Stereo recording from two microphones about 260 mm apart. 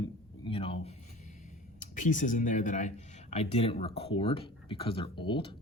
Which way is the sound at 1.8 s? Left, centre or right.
Left.